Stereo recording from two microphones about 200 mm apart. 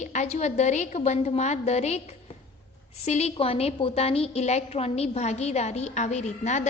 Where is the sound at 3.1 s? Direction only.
35° left (ahead or behind).